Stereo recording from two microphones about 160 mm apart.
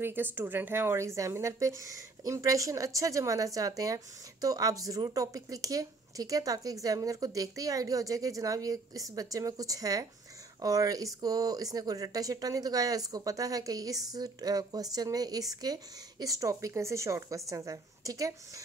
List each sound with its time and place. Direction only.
0.0 s a woman's voice: 10° right (ahead or behind)